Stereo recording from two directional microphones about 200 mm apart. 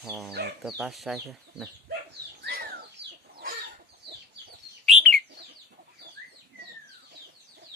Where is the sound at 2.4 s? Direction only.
50° right (ahead or behind).